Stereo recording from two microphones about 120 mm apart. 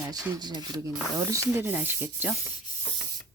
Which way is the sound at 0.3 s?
35° right (ahead or behind).